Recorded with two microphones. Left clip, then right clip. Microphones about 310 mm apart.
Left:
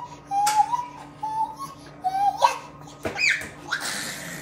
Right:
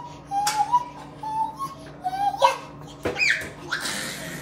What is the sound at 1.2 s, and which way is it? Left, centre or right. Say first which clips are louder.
Child singing: even; centre.